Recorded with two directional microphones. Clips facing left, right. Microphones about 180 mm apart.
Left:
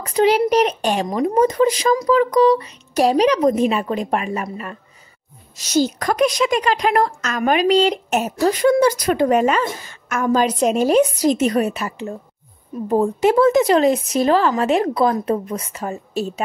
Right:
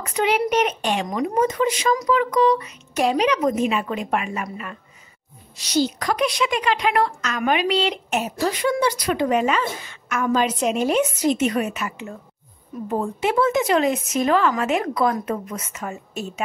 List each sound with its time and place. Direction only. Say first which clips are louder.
0.0 s speech: left 5 dB; 35° left (ahead or behind)
5.6 s a woman's voice: left 3 dB; 45° left (ahead or behind)